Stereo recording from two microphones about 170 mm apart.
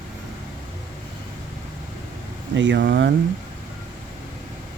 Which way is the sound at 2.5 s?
90° right.